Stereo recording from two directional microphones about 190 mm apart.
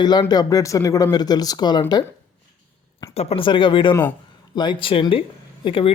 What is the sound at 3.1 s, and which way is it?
Speech, 30° left (ahead or behind).